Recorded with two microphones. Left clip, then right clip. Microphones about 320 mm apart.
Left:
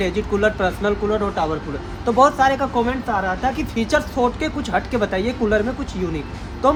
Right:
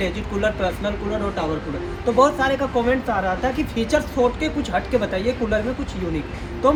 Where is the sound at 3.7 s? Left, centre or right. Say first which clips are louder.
Even; left.